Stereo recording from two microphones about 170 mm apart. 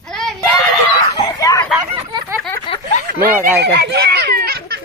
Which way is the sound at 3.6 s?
75° right (ahead or behind).